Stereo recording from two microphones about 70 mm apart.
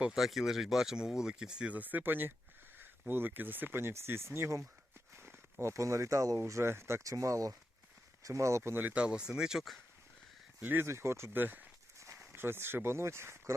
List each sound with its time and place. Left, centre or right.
0.0 s speech: centre; by 6.4 s right
6.4 s speech: right
8.7 s speech: right
9.0 s speech: centre
10.6 s speech: right
10.8 s speech: right
11.9 s speech: right